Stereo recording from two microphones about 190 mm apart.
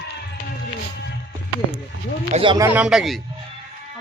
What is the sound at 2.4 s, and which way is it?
Speech, 25° right (ahead or behind).